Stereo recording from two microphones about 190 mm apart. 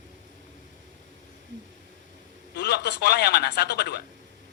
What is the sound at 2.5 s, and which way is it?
Speech, 60° left (ahead or behind).